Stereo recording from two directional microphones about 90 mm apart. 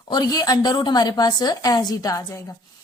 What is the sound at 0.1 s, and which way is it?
A woman's voice, 45° left (ahead or behind).